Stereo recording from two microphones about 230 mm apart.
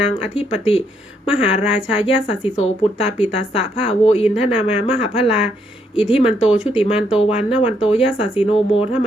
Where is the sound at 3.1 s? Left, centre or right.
Left.